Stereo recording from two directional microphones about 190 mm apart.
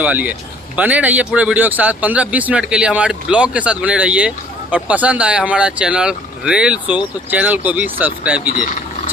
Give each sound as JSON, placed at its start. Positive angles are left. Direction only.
{"t": 0.0, "sound": "speech", "side_deg": -10}